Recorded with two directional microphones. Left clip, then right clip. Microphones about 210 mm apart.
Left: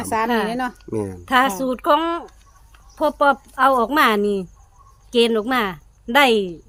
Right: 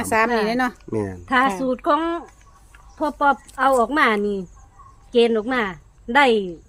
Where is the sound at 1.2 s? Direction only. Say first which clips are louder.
Left 1 dB; 45° left (ahead or behind).